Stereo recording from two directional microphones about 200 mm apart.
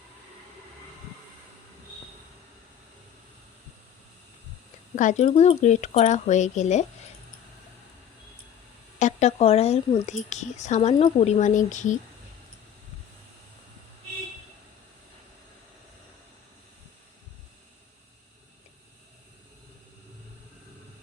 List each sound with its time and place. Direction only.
4.9 s speech: 35° left (ahead or behind)
9.0 s speech: 35° left (ahead or behind)